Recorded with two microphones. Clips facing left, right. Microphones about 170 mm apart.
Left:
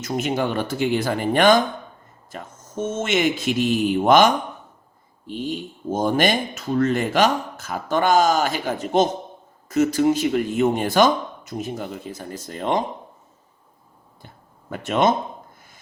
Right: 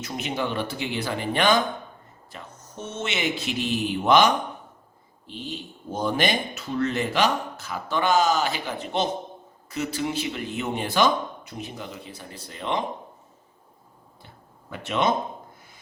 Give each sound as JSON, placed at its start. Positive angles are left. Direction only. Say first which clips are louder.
{"t": 0.0, "sound": "speech", "louder": "left 6 dB", "side_deg": 45}
{"t": 14.7, "sound": "speech", "louder": "left 5 dB", "side_deg": 45}